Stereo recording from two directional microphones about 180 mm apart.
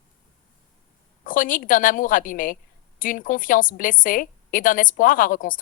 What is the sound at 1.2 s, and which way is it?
A woman's voice, 50° left (ahead or behind).